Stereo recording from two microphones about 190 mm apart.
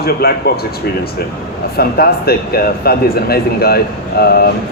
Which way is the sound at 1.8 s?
55° left (ahead or behind).